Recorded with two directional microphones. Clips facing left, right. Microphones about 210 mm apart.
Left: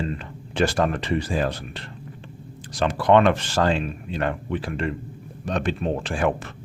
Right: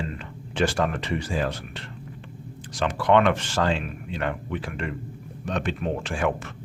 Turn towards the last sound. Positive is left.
turn(degrees=35)  # may be behind; listen again after turning